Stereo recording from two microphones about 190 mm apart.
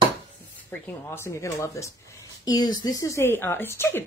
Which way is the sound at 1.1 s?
15° left (ahead or behind).